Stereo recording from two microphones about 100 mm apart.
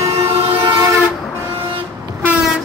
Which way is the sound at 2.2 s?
15° right (ahead or behind).